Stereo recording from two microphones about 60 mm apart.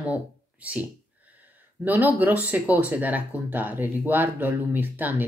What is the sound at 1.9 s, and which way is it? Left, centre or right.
Speech, right.